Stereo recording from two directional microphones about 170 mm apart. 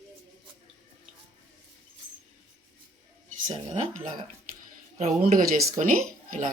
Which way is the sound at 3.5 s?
45° right (ahead or behind).